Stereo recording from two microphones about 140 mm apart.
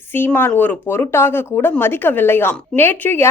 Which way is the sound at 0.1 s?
15° left (ahead or behind).